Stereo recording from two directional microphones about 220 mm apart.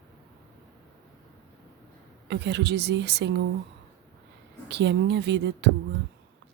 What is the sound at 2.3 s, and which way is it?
Speech, 50° right (ahead or behind).